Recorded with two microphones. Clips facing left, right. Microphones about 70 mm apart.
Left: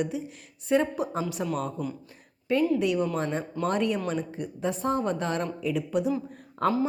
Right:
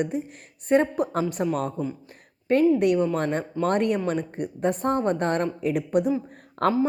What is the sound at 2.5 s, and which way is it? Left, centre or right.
A woman's voice, right.